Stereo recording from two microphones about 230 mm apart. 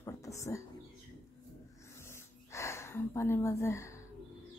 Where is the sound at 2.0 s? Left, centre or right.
Centre.